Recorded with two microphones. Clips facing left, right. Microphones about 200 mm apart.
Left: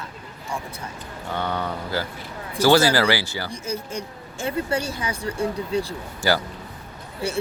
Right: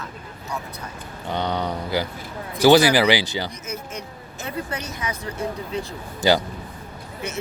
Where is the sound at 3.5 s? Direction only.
30° left (ahead or behind).